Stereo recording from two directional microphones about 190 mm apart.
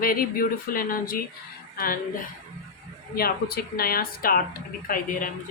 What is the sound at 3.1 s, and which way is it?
A woman's voice, 55° left (ahead or behind).